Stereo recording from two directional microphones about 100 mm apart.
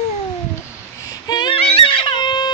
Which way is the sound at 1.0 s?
40° left (ahead or behind).